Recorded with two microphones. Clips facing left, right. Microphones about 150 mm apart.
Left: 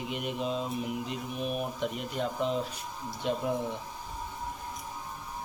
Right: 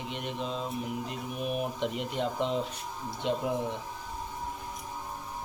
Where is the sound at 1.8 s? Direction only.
20° right (ahead or behind).